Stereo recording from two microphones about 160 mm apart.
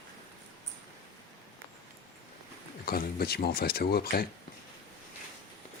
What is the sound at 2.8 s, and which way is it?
Speech, 70° left (ahead or behind).